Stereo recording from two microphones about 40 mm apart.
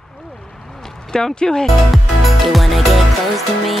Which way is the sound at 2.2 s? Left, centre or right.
Centre.